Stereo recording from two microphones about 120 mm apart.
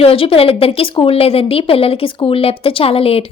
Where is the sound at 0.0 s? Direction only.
50° left (ahead or behind).